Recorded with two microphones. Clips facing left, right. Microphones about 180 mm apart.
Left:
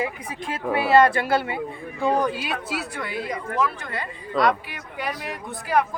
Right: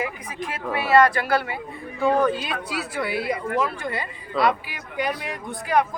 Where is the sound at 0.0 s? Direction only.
30° left (ahead or behind).